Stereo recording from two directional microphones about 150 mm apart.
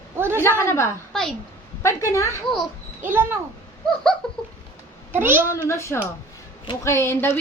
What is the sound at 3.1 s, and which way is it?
Speech, 15° right (ahead or behind).